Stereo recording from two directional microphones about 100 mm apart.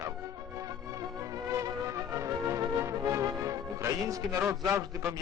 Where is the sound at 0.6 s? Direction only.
35° right (ahead or behind).